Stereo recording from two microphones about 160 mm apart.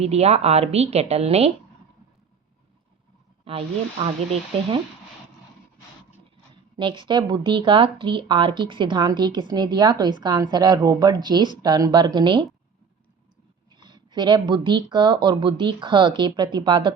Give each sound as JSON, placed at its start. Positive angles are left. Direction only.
{"t": 0.0, "sound": "a woman's voice", "side_deg": -40}
{"t": 3.5, "sound": "a woman's voice", "side_deg": -40}
{"t": 6.7, "sound": "a woman's voice", "side_deg": -30}
{"t": 13.7, "sound": "speech", "side_deg": -30}